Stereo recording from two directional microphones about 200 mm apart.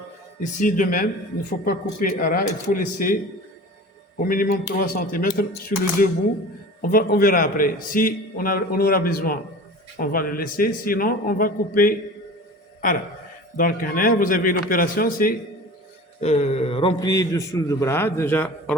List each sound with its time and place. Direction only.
0.3 s a man's voice: 40° left (ahead or behind)
4.2 s a man's voice: 45° left (ahead or behind)
13.6 s a man's voice: 45° left (ahead or behind)
16.2 s a man's voice: 35° left (ahead or behind); by 18.5 s 10° left (ahead or behind)